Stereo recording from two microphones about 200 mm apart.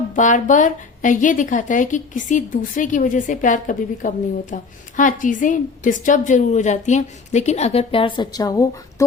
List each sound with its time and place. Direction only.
0.1 s speech: 40° left (ahead or behind); by 9.0 s 15° left (ahead or behind)